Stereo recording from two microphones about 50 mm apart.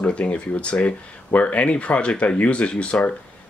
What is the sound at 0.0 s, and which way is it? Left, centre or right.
Speech, left.